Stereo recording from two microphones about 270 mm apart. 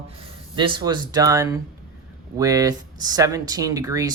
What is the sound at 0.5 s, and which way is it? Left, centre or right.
Speech, centre.